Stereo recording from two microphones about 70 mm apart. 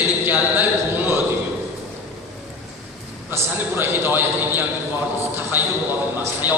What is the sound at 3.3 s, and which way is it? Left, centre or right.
A man's voice, right.